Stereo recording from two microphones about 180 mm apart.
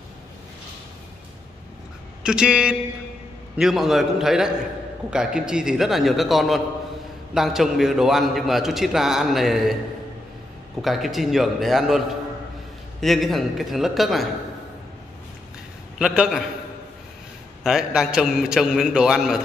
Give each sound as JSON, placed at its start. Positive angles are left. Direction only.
{"t": 2.2, "sound": "a man's voice", "side_deg": -5}
{"t": 10.8, "sound": "a man's voice", "side_deg": 0}
{"t": 13.0, "sound": "a man's voice", "side_deg": 0}
{"t": 16.0, "sound": "a man's voice", "side_deg": -5}
{"t": 17.6, "sound": "a man's voice", "side_deg": -5}